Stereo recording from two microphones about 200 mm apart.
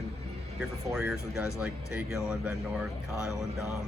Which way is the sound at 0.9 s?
5° right (ahead or behind).